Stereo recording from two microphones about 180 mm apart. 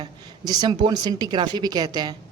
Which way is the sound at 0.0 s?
20° right (ahead or behind).